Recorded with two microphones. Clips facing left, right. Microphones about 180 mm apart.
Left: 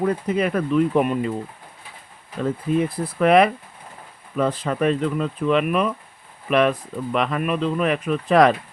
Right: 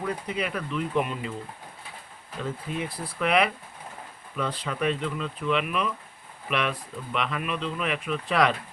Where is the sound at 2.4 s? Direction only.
45° left (ahead or behind).